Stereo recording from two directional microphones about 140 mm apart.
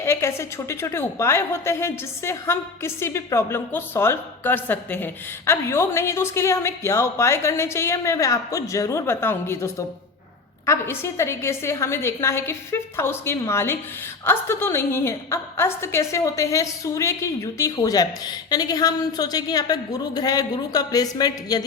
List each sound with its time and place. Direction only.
0.0 s a woman's voice: 20° left (ahead or behind)